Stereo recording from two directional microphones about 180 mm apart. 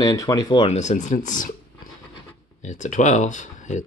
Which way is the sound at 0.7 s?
40° left (ahead or behind).